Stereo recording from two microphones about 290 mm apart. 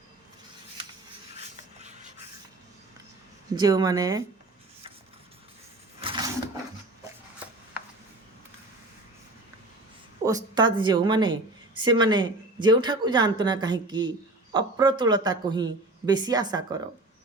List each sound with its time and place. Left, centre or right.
1.8 s a sound: right
3.5 s speech: centre
6.0 s sewing machine: centre
10.2 s speech: centre